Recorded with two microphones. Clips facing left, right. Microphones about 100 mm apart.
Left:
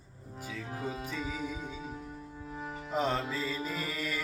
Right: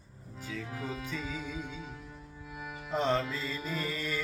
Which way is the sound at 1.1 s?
10° left (ahead or behind).